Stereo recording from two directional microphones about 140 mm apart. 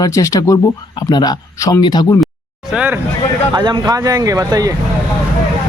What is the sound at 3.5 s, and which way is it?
Speech, 30° right (ahead or behind).